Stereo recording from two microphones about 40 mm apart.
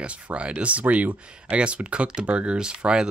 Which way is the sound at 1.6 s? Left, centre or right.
Right.